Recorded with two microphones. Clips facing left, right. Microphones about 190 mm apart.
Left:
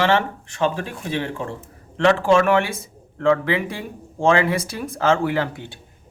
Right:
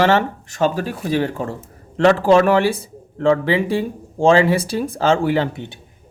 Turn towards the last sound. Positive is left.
turn(degrees=-25)  # may be behind; listen again after turning